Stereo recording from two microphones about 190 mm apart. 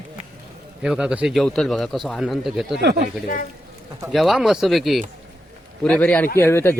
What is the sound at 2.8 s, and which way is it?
Speech, 60° right (ahead or behind).